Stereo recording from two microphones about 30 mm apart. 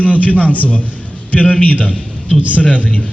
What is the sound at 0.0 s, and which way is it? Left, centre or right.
Speech, left.